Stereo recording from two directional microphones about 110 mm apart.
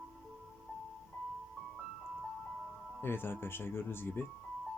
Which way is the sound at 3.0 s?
20° left (ahead or behind).